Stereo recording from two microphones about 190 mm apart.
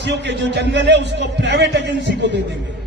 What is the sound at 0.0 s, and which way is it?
A man's voice, 65° right (ahead or behind).